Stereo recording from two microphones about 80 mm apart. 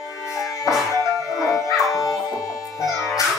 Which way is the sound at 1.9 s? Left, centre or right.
Left.